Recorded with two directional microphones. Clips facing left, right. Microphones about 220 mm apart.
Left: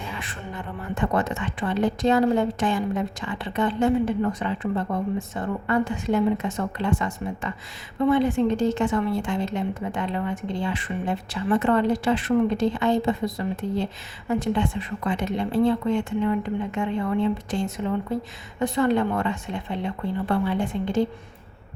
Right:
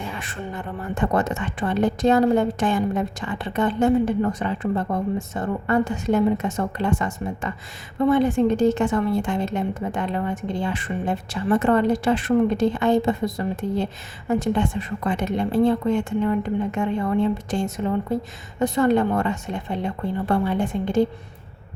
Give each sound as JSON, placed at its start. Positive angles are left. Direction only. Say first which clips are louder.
{"t": 0.5, "sound": "a woman's voice", "louder": "right 1 dB", "side_deg": -45}
{"t": 18.6, "sound": "a woman's voice", "louder": "right 3 dB", "side_deg": -45}